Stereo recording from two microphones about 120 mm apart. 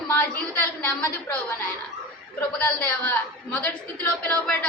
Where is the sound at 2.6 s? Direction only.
15° left (ahead or behind).